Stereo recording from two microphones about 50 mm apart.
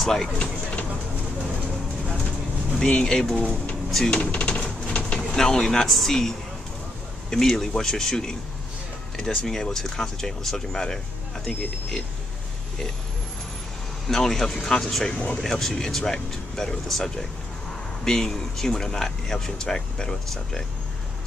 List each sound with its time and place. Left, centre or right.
0.0 s speech: centre
0.4 s speech: left
2.8 s speech: centre
4.1 s a sound: left
5.3 s speech: centre
14.0 s speech: centre
15.1 s speech: left
15.4 s speech: centre